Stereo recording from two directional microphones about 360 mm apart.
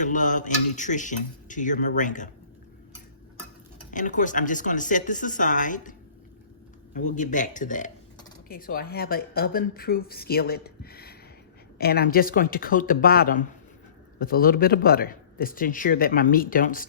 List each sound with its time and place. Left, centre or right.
0.0 s speech: left
3.9 s speech: left
7.2 s speech: left